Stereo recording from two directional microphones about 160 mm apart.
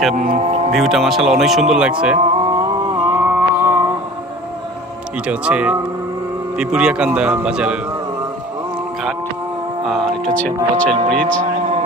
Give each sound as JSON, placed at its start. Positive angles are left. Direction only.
{"t": 0.3, "sound": "speech", "side_deg": -40}
{"t": 0.7, "sound": "moo", "side_deg": 0}
{"t": 2.2, "sound": "music", "side_deg": -30}
{"t": 5.2, "sound": "speech", "side_deg": -5}
{"t": 6.6, "sound": "moo", "side_deg": -5}
{"t": 9.8, "sound": "moo", "side_deg": 0}
{"t": 11.1, "sound": "speech", "side_deg": 5}